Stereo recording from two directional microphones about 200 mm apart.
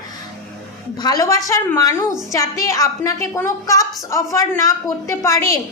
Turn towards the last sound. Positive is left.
turn(degrees=15)  # may be behind; listen again after turning